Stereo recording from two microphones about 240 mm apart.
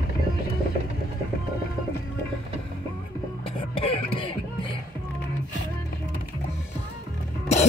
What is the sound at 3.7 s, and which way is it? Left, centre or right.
Music, left.